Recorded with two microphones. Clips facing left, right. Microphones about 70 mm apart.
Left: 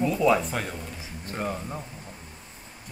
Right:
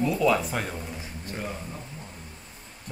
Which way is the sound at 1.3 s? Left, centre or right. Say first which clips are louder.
Left 5 dB; left.